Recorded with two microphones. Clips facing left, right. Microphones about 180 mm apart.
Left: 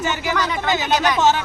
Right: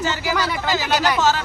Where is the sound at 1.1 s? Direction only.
20° left (ahead or behind).